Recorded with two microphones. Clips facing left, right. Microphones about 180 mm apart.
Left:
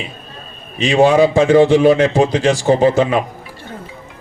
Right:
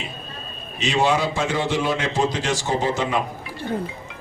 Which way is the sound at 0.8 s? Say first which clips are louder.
Left 10 dB; 55° left (ahead or behind).